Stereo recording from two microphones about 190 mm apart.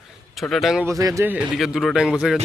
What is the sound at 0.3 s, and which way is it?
Speech, centre (ahead or behind).